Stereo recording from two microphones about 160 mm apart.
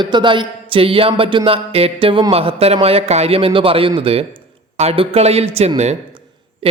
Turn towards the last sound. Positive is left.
turn(degrees=-35)  # may be behind; listen again after turning